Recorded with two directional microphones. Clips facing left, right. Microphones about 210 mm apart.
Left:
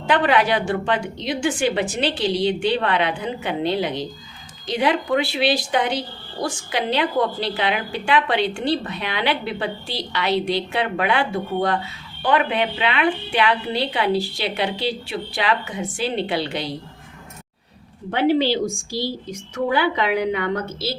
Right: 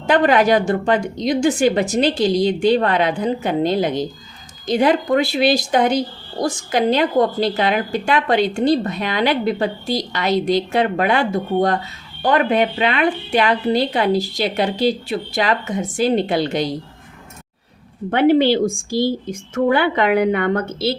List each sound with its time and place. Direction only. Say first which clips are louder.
0.1 s speech: right 4 dB; 45° right (ahead or behind)
18.1 s speech: right 5 dB; 55° right (ahead or behind)